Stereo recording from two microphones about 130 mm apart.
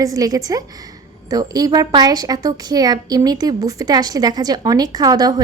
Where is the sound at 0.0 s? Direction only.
25° right (ahead or behind).